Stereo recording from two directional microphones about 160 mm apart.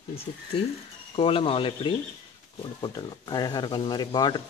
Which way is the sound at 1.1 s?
35° left (ahead or behind).